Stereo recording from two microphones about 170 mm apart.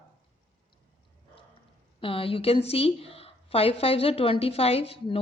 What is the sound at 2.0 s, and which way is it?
A woman's voice, 30° left (ahead or behind).